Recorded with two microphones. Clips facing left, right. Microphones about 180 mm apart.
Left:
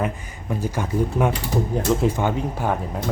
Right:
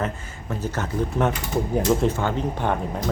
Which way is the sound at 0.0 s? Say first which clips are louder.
Left 2 dB; 10° left (ahead or behind).